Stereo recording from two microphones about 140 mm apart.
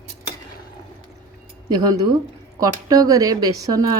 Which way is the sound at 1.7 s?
25° right (ahead or behind).